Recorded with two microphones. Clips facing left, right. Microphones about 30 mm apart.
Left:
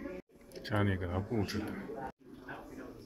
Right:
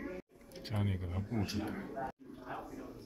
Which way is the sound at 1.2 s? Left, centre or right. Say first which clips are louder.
Left 2 dB; centre.